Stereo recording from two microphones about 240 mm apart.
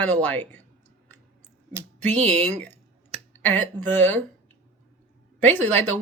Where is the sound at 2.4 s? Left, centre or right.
Centre.